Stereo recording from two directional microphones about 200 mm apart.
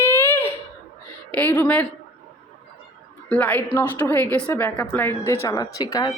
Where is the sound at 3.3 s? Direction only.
10° left (ahead or behind).